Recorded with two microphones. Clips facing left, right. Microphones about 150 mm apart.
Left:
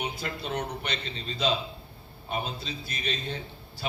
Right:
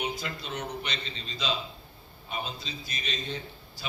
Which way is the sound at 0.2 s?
55° left (ahead or behind).